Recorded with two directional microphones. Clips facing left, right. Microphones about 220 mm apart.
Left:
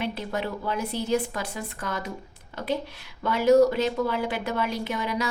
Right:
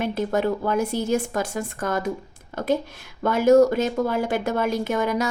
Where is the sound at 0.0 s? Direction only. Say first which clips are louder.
Right 7 dB; 45° right (ahead or behind).